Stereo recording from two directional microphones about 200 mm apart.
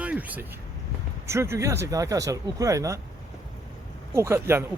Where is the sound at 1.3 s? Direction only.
15° right (ahead or behind).